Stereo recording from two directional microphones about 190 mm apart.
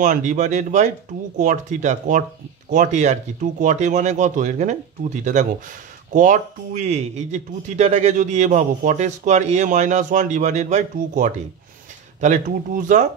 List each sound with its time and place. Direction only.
0.0 s speech: 40° right (ahead or behind)